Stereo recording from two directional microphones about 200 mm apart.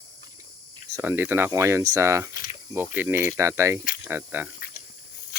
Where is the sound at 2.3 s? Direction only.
45° left (ahead or behind).